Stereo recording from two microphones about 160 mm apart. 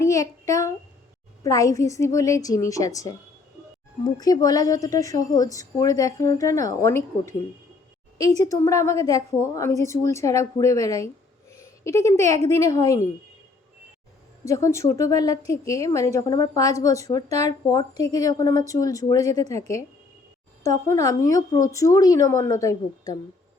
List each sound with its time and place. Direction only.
0.0 s a sound: 20° left (ahead or behind)
1.5 s a woman's voice: 20° left (ahead or behind)
8.4 s a woman's voice: 20° left (ahead or behind)
11.5 s a sound: 20° left (ahead or behind)
12.5 s a woman's voice: 20° left (ahead or behind)
14.4 s a woman's voice: 20° left (ahead or behind)